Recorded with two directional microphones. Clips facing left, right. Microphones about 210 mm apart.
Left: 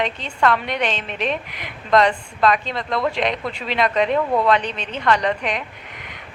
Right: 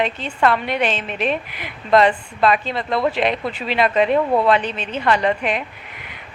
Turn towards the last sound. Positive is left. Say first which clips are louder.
# right 2 dB
turn(degrees=-5)  # may be behind; listen again after turning